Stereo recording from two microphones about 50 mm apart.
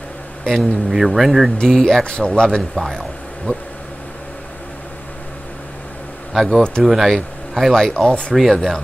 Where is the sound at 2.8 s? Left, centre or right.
Centre.